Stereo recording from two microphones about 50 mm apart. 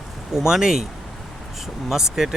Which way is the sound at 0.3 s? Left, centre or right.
Centre.